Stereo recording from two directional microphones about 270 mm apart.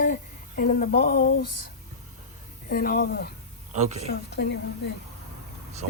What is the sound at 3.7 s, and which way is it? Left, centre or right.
Speech, right.